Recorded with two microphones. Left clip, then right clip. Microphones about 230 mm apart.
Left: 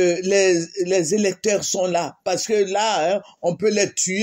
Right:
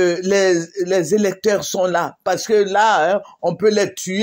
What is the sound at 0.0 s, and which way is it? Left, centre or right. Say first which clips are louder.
Speech: right 2 dB; centre.